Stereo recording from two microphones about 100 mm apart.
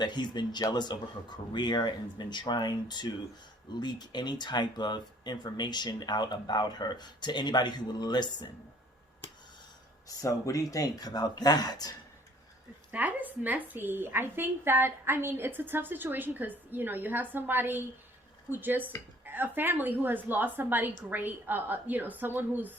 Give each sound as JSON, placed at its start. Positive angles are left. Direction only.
{"t": 0.0, "sound": "speech", "side_deg": 45}
{"t": 10.2, "sound": "speech", "side_deg": 35}
{"t": 12.9, "sound": "a woman's voice", "side_deg": -15}